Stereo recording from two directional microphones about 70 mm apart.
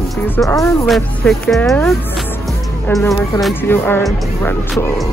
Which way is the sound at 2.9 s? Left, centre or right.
Left.